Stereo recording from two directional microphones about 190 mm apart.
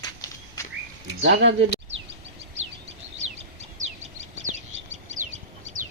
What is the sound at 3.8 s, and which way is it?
Bird, 35° right (ahead or behind).